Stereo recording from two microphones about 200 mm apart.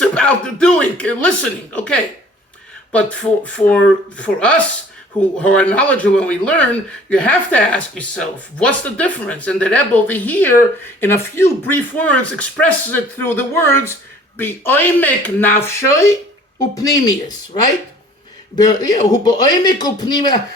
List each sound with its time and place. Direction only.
0.0 s speech: 5° left (ahead or behind); by 20.4 s 20° left (ahead or behind)